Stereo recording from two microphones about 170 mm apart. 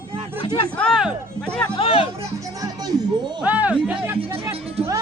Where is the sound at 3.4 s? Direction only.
10° right (ahead or behind).